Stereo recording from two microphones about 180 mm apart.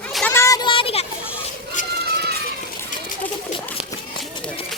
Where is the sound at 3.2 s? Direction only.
10° left (ahead or behind).